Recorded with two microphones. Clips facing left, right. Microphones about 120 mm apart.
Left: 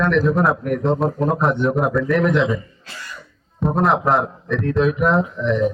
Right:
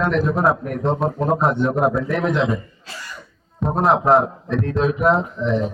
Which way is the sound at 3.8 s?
Centre (ahead or behind).